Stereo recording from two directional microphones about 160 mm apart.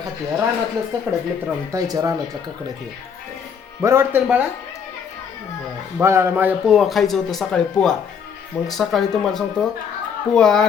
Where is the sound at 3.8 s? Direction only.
15° right (ahead or behind).